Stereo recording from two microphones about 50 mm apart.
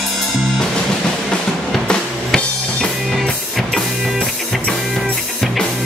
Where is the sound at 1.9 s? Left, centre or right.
Centre.